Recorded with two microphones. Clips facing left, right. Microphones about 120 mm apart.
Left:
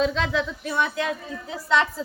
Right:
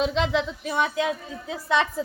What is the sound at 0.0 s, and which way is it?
A woman's voice, 20° right (ahead or behind).